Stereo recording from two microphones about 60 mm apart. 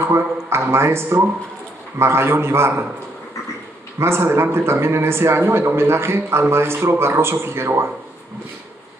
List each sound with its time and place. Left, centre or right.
0.1 s a man's voice: right
4.0 s a man's voice: right